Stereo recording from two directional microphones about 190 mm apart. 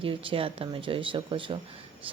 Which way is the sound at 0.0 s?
30° right (ahead or behind).